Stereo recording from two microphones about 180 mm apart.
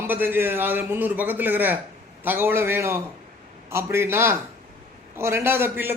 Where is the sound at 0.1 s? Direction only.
10° right (ahead or behind).